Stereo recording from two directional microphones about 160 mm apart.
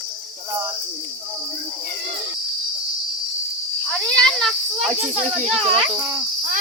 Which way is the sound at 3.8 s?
5° left (ahead or behind).